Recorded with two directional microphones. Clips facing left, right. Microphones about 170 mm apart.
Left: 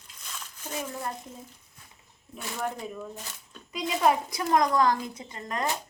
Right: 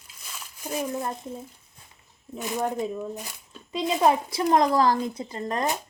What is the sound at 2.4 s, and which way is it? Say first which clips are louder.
A child's voice: right 6 dB; 20° right (ahead or behind).